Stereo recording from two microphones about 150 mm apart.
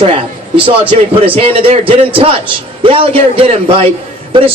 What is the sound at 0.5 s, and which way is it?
Speech, 35° right (ahead or behind).